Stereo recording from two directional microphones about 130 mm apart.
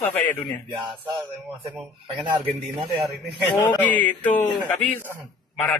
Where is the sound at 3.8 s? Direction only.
15° left (ahead or behind).